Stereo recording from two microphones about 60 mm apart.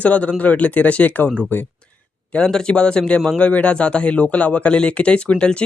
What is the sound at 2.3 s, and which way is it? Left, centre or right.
A man's voice, centre.